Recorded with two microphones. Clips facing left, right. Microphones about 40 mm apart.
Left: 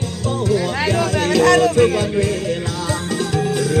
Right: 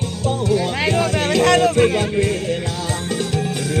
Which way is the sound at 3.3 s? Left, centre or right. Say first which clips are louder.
Left 3 dB; right.